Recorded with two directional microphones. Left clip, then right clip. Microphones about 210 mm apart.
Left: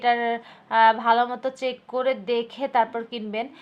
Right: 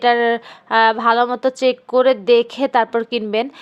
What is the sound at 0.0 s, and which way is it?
Speech, 40° right (ahead or behind).